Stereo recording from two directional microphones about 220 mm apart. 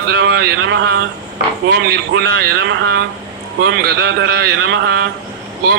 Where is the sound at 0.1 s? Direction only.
50° right (ahead or behind).